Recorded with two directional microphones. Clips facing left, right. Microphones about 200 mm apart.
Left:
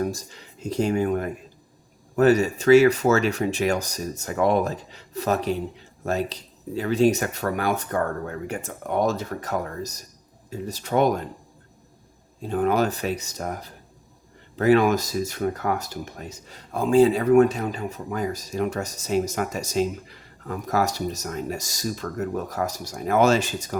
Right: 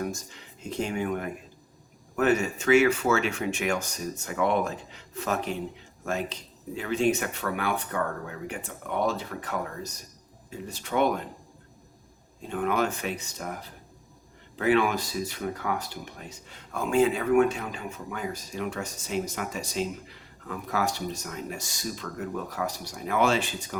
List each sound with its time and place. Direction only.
0.0 s speech: 35° left (ahead or behind)
12.4 s speech: 35° left (ahead or behind)